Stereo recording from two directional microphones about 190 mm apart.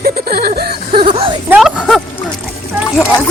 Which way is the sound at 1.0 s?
30° right (ahead or behind).